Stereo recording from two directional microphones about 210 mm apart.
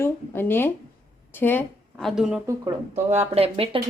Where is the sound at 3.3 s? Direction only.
30° right (ahead or behind).